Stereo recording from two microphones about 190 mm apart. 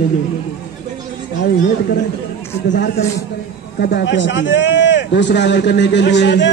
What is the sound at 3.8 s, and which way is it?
A man's voice, 60° left (ahead or behind).